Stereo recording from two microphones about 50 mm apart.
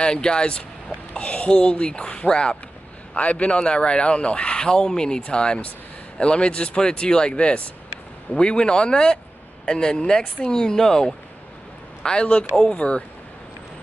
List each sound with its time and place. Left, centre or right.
0.0 s speech: centre